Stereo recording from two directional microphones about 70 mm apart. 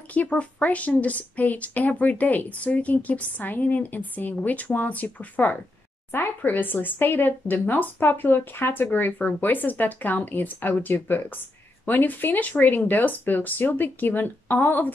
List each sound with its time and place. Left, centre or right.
0.1 s speech: left